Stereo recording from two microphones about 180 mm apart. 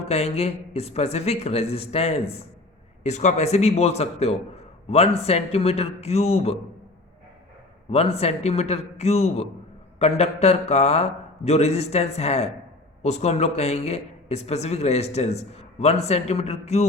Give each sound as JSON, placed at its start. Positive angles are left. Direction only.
{"t": 0.0, "sound": "a man's voice", "side_deg": 35}
{"t": 7.9, "sound": "a man's voice", "side_deg": 35}